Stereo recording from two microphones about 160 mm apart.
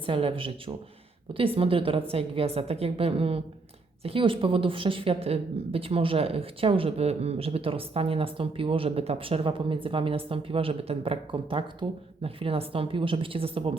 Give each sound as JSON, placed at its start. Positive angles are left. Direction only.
{"t": 0.0, "sound": "a woman's voice", "side_deg": -35}